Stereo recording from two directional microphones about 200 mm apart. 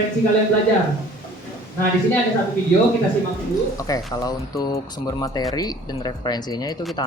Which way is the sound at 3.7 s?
20° left (ahead or behind).